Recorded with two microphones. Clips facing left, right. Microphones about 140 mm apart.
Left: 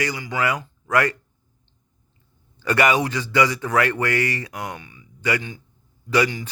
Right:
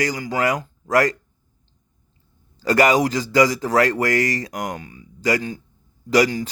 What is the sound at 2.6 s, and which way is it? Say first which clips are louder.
A man's voice: right 3 dB; 40° right (ahead or behind).